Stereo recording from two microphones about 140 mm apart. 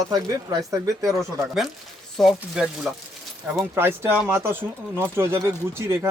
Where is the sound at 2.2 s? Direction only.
Centre (ahead or behind).